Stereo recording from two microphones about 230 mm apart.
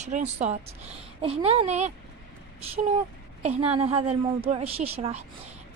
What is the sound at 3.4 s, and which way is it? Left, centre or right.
A woman's voice, right.